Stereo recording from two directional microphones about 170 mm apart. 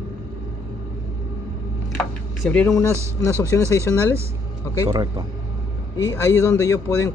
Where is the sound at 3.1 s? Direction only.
15° left (ahead or behind).